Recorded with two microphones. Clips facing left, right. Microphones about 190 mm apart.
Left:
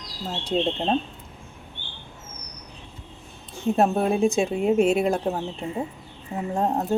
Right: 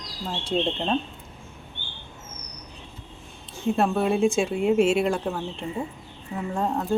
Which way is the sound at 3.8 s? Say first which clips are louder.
Left 1 dB; 40° left (ahead or behind).